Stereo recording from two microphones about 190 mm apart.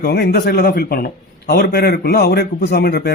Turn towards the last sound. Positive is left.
turn(degrees=55)  # may be behind; listen again after turning